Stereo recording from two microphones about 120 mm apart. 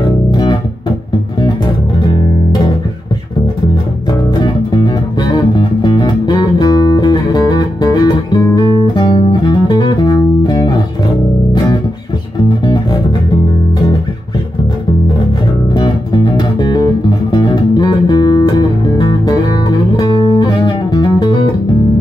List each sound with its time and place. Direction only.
0.3 s music: 40° left (ahead or behind)
4.4 s music: 40° left (ahead or behind)
15.7 s music: 40° left (ahead or behind)